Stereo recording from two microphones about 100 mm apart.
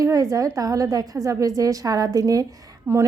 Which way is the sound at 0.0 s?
35° right (ahead or behind).